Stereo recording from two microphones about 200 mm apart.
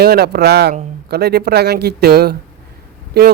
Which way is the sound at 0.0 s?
55° right (ahead or behind).